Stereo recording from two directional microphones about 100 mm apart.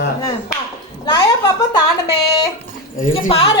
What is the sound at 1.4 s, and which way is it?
Speech, 45° left (ahead or behind).